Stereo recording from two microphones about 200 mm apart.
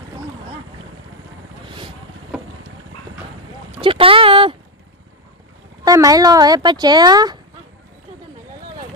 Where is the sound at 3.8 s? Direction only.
25° right (ahead or behind).